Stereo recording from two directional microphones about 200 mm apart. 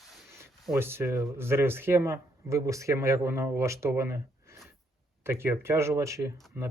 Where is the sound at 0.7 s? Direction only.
10° right (ahead or behind).